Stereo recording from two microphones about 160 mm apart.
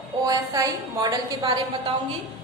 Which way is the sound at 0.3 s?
25° right (ahead or behind).